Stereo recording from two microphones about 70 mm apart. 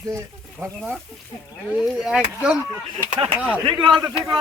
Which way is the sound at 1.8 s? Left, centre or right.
Centre.